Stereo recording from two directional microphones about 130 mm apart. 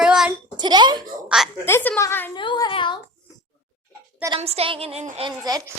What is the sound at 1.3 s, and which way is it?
Speech, 5° right (ahead or behind).